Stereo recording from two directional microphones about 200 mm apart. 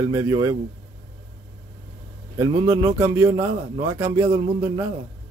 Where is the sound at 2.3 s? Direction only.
15° right (ahead or behind).